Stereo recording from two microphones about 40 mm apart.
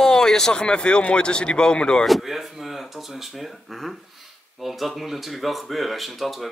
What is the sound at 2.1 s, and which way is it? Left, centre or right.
Speech, centre.